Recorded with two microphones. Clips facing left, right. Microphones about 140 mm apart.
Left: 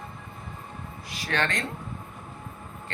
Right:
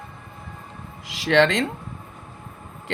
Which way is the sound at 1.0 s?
90° right.